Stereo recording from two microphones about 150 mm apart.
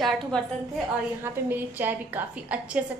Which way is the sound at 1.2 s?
15° right (ahead or behind).